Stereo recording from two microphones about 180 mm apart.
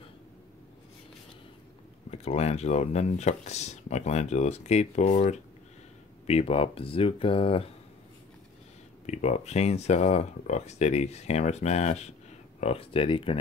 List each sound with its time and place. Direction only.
2.0 s speech: 35° left (ahead or behind)
9.0 s speech: 40° left (ahead or behind)